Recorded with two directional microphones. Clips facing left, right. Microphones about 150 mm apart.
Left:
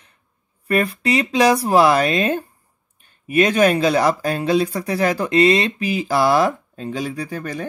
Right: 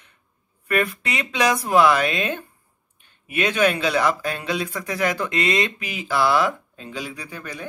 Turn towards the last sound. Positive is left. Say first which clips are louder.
# left 8 dB
turn(degrees=40)  # may be behind; listen again after turning